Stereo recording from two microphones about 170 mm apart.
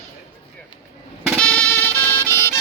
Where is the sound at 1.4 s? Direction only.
5° left (ahead or behind).